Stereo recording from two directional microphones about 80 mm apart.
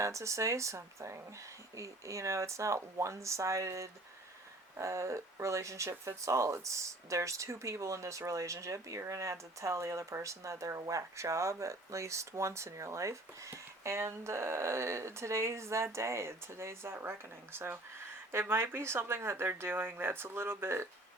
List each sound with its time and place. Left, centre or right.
0.0 s speech: right